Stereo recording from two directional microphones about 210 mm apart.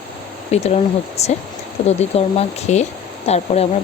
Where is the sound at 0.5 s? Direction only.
30° left (ahead or behind).